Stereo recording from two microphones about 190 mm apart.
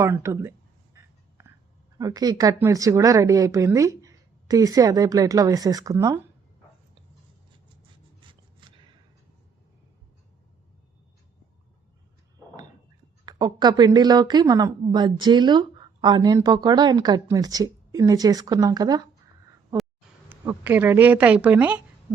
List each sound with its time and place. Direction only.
0.0 s speech: 15° right (ahead or behind)
0.9 s whispering: 15° right (ahead or behind)
2.0 s speech: 20° right (ahead or behind)
8.2 s a sound: 25° right (ahead or behind)
13.2 s speech: 20° right (ahead or behind)
20.3 s speech: 10° right (ahead or behind)